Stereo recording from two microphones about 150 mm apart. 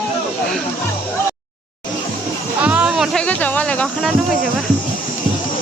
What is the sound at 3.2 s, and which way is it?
Speech, 10° left (ahead or behind).